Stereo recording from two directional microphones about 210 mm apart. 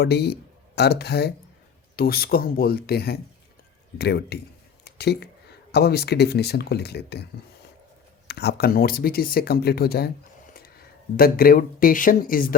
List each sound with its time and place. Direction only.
0.0 s speech: 50° left (ahead or behind)
8.3 s speech: 50° left (ahead or behind)